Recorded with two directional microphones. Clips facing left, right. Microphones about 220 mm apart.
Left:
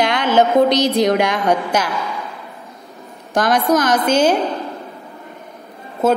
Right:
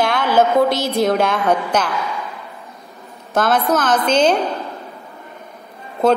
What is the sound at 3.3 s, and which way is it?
A woman's voice, 15° left (ahead or behind).